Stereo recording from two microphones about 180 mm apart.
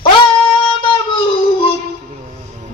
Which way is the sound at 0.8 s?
25° left (ahead or behind).